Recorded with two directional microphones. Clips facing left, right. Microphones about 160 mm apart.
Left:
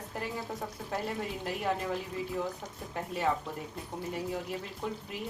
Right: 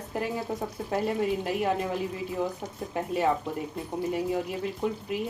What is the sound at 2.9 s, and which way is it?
Speech, 20° right (ahead or behind).